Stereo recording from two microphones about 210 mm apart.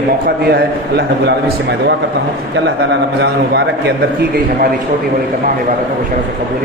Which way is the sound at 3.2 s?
50° right (ahead or behind).